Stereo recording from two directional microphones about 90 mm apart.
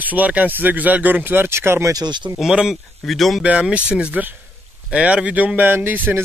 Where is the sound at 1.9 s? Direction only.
55° right (ahead or behind).